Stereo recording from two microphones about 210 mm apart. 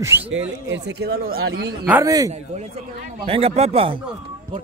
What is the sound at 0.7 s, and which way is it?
Speech, 55° right (ahead or behind).